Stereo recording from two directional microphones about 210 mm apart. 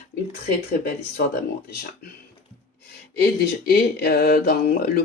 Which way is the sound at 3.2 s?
45° left (ahead or behind).